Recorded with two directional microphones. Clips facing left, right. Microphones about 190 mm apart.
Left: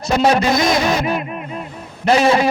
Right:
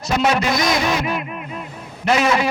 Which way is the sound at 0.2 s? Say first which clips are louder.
Left 4 dB; 35° left (ahead or behind).